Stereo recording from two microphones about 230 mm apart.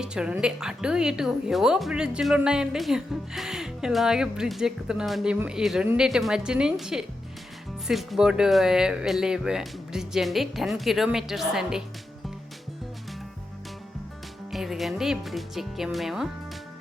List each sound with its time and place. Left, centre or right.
0.0 s a woman's voice: centre
14.5 s a woman's voice: centre